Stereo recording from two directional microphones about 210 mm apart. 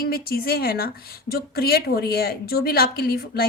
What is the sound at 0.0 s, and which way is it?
A woman's voice, 45° left (ahead or behind).